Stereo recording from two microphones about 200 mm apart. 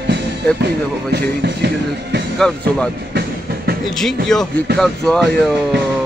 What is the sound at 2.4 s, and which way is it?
Speech, 5° left (ahead or behind).